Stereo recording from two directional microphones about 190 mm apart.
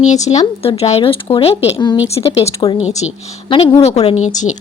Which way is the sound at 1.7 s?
20° left (ahead or behind).